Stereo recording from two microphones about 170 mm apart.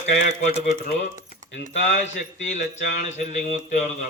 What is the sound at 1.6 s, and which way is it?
Speech, 90° left.